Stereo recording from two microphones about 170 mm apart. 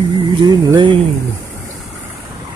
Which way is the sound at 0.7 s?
25° right (ahead or behind).